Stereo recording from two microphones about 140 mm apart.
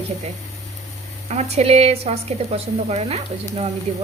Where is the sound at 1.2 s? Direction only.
50° right (ahead or behind).